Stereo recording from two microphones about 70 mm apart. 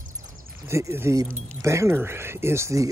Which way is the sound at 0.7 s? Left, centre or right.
Right.